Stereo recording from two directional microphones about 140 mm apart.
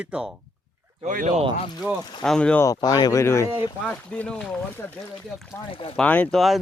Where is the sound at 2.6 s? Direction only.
25° left (ahead or behind).